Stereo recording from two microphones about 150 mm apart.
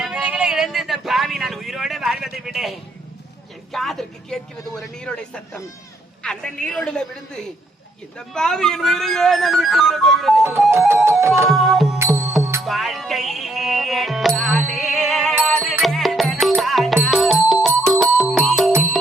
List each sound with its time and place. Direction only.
0.0 s vehicle: 5° right (ahead or behind)
2.4 s a sound: 5° right (ahead or behind)
3.7 s speech: centre (ahead or behind)
10.7 s music: 15° right (ahead or behind)
11.4 s speech: centre (ahead or behind)
12.4 s music: 20° right (ahead or behind)
12.6 s music: centre (ahead or behind)